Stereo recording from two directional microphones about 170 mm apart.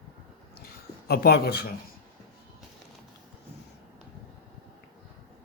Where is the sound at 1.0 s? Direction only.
70° left (ahead or behind).